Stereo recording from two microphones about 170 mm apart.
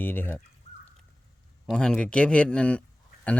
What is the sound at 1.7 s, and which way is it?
Speech, 5° left (ahead or behind).